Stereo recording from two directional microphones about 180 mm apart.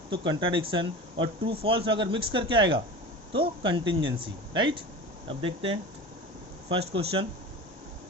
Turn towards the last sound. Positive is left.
turn(degrees=-30)  # may be behind; listen again after turning